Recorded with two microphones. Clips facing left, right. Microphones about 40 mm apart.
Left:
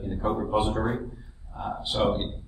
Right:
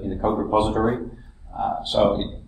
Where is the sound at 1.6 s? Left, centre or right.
Centre.